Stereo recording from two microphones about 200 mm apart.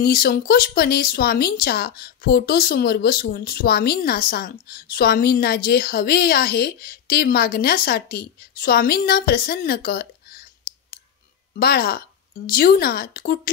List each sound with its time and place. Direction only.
0.0 s speech: 50° left (ahead or behind)
11.5 s speech: 50° left (ahead or behind)